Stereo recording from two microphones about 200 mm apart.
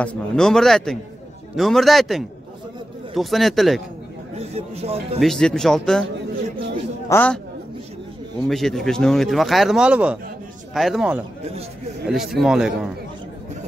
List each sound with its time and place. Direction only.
0.0 s speech: 5° left (ahead or behind)
4.4 s speech: 30° right (ahead or behind)
5.2 s speech: centre (ahead or behind)
7.1 s a man's voice: 10° left (ahead or behind)
8.5 s speech: centre (ahead or behind)